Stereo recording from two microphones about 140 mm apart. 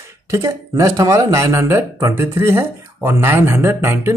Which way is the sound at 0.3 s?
20° right (ahead or behind).